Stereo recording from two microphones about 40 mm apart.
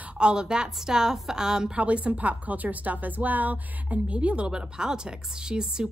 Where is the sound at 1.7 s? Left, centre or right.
Right.